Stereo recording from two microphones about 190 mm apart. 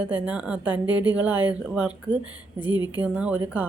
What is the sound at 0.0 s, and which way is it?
Speech, 10° right (ahead or behind).